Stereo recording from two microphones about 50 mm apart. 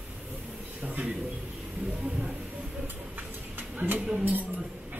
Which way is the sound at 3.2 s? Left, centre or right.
Right.